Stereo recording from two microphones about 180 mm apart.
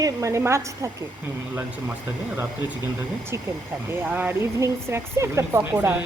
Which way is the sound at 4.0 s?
10° right (ahead or behind).